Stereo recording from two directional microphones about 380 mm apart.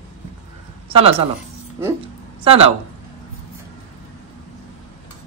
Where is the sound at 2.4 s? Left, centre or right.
Centre.